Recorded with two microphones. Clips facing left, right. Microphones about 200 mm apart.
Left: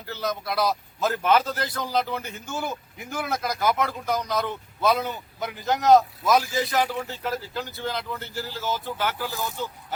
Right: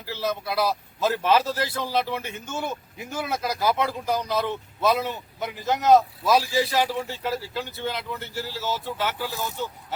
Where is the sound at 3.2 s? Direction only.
5° right (ahead or behind).